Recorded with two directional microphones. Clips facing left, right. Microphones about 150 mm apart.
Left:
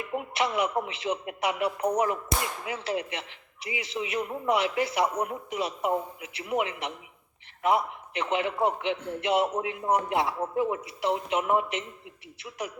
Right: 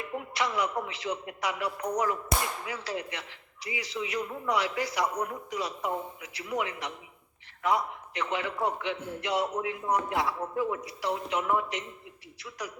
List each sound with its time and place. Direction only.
0.2 s speech: 20° left (ahead or behind)